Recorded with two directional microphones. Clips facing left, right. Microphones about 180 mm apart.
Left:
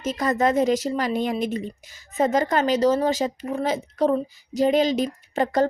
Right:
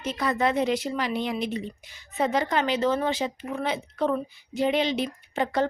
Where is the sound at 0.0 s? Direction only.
45° left (ahead or behind).